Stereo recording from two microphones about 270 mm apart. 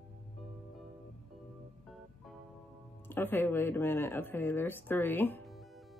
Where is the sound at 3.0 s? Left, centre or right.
Centre.